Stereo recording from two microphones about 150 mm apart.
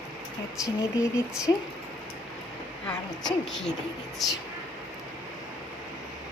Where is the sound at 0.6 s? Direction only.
20° left (ahead or behind).